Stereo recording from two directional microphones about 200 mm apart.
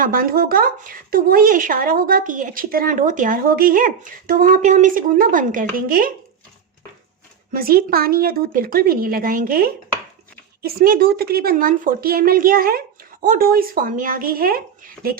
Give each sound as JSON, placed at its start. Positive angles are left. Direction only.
{"t": 0.0, "sound": "a woman's voice", "side_deg": -45}
{"t": 7.5, "sound": "a woman's voice", "side_deg": -45}